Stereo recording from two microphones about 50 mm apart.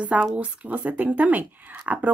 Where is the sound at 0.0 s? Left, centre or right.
Right.